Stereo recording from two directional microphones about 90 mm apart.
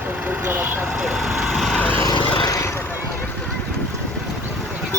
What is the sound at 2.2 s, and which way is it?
Vehicle, 70° left (ahead or behind).